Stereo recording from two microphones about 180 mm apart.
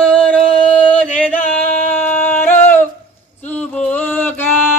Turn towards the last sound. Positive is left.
turn(degrees=10)  # may be behind; listen again after turning